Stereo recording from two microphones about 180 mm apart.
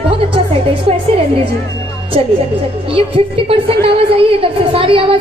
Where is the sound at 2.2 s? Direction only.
30° right (ahead or behind).